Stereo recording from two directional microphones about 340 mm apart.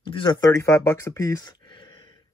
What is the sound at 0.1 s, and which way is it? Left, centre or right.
Speech, centre.